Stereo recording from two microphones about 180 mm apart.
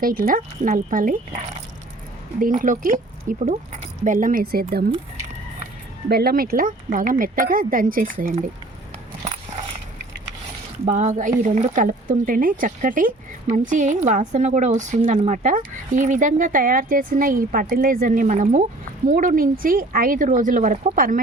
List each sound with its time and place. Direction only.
0.0 s speech: 50° right (ahead or behind)
2.4 s speech: 45° right (ahead or behind)
6.1 s speech: 60° right (ahead or behind)
10.8 s speech: 40° right (ahead or behind)